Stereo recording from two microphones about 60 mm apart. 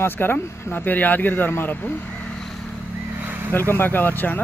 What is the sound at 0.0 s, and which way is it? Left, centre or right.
Speech, left.